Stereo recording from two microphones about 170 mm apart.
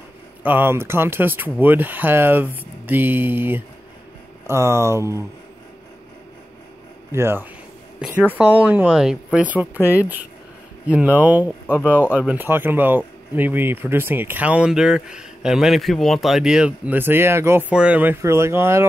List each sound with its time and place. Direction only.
0.4 s speech: 10° right (ahead or behind)
7.1 s speech: 15° right (ahead or behind)
11.6 s speech: 10° left (ahead or behind)
12.1 s speech: 10° right (ahead or behind)